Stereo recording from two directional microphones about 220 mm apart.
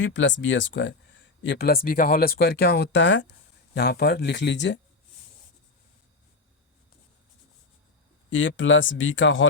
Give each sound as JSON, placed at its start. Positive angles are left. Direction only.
{"t": 0.0, "sound": "speech", "side_deg": 55}
{"t": 8.3, "sound": "speech", "side_deg": 60}